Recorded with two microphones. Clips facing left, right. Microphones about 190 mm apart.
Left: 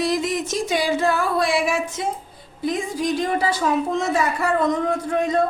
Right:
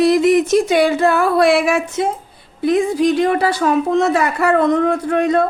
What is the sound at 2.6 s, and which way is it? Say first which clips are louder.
A woman's voice: right 9 dB; 65° right (ahead or behind).